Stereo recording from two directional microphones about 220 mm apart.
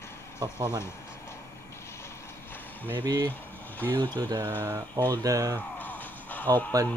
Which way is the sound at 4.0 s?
20° right (ahead or behind).